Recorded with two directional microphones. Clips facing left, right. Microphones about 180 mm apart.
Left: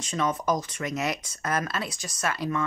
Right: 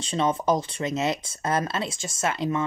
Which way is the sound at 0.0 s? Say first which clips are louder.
Right 3 dB; 30° right (ahead or behind).